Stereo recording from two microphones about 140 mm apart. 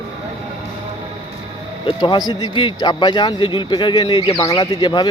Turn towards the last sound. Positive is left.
turn(degrees=30)  # may be behind; listen again after turning